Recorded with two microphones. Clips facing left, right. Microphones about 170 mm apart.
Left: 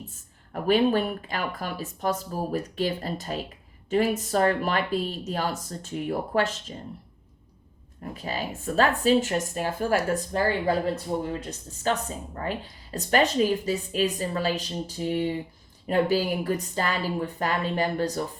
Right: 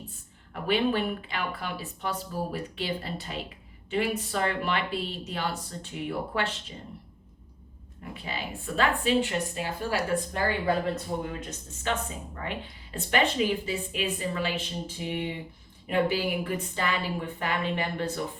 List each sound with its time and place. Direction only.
0.5 s speech: 40° left (ahead or behind)
8.0 s speech: 40° left (ahead or behind)